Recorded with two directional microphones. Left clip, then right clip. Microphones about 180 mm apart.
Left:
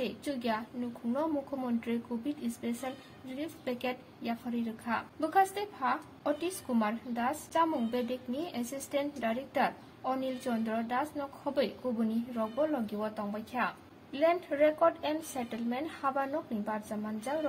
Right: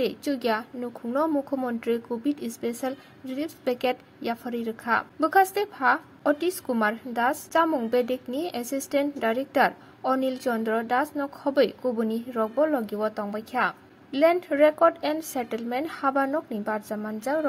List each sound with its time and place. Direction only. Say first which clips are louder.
0.0 s a woman's voice: right 9 dB; 30° right (ahead or behind)